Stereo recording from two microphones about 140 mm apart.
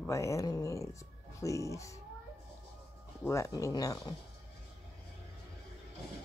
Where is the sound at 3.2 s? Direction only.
20° left (ahead or behind).